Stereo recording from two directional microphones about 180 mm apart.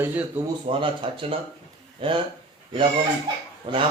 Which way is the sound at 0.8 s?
30° right (ahead or behind).